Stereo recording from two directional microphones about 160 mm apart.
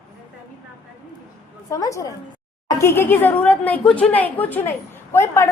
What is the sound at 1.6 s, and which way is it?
A woman's voice, 20° left (ahead or behind).